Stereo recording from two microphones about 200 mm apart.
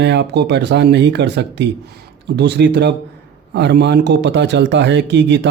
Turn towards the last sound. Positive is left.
turn(degrees=-65)  # may be behind; listen again after turning